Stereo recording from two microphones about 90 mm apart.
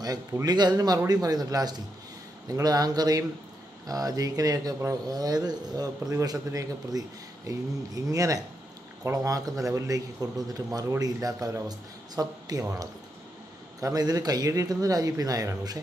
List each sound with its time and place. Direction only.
0.0 s a man's voice: 45° right (ahead or behind)